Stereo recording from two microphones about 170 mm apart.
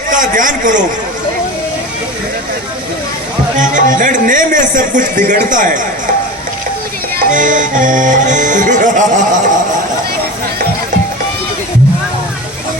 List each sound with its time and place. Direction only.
0.1 s a man's voice: 50° right (ahead or behind)
3.6 s music: 50° right (ahead or behind)
7.3 s music: 50° right (ahead or behind)